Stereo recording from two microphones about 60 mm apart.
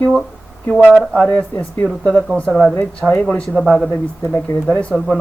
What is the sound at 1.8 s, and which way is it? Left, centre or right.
Speech, centre.